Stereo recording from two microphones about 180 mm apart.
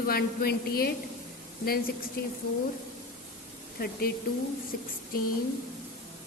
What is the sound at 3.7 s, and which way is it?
Speech, 55° left (ahead or behind).